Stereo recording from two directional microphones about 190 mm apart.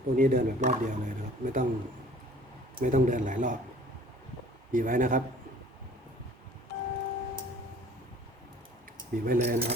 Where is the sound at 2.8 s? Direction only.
40° right (ahead or behind).